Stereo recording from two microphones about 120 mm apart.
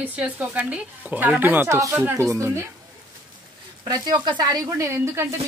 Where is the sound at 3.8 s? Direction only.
35° right (ahead or behind).